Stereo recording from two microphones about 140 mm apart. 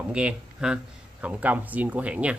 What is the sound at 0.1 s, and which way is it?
Speech, 5° right (ahead or behind).